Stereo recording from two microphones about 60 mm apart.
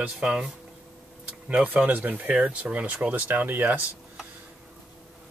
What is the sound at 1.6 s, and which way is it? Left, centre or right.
Speech, right.